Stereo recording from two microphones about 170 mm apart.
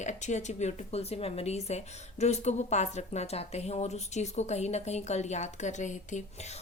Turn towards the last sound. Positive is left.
turn(degrees=45)  # may be behind; listen again after turning